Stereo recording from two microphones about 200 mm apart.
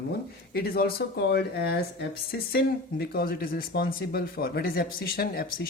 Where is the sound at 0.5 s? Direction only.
50° left (ahead or behind).